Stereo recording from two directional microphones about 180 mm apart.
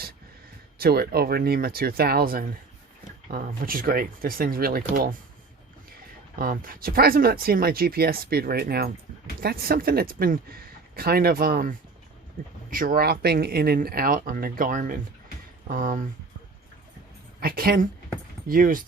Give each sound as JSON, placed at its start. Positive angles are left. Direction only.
{"t": 0.8, "sound": "speech", "side_deg": -60}
{"t": 6.4, "sound": "speech", "side_deg": -50}
{"t": 12.7, "sound": "speech", "side_deg": -50}
{"t": 17.4, "sound": "speech", "side_deg": -55}